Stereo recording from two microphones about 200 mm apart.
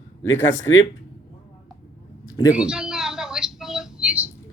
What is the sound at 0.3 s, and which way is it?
Speech, 75° left (ahead or behind).